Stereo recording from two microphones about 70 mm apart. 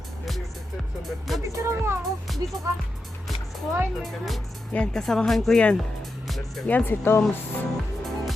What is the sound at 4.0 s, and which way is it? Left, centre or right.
Speech, centre.